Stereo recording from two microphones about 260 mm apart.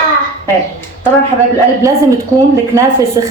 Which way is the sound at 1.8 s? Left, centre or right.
Centre.